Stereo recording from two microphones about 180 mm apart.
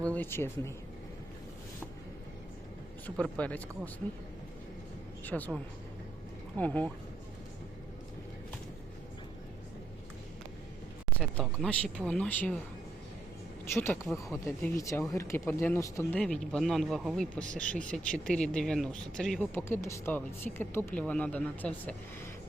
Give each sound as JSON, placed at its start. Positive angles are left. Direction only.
{"t": 0.0, "sound": "speech", "side_deg": 10}
{"t": 3.2, "sound": "speech", "side_deg": 5}
{"t": 5.2, "sound": "speech", "side_deg": 10}
{"t": 6.6, "sound": "speech", "side_deg": 10}
{"t": 11.2, "sound": "speech", "side_deg": 5}
{"t": 13.8, "sound": "speech", "side_deg": 15}
{"t": 14.3, "sound": "speech", "side_deg": 0}
{"t": 14.7, "sound": "speech", "side_deg": 15}
{"t": 16.2, "sound": "speech", "side_deg": 5}
{"t": 19.5, "sound": "speech", "side_deg": 15}